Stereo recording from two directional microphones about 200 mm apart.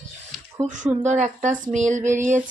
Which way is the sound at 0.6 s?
35° right (ahead or behind).